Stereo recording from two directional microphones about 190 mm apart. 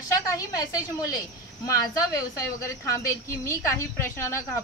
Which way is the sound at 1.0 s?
20° left (ahead or behind).